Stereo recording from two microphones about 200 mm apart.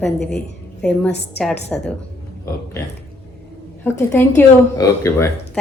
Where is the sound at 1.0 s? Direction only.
60° left (ahead or behind).